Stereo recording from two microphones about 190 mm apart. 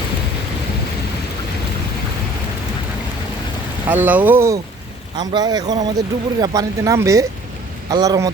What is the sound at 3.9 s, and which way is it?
Speech, 10° right (ahead or behind).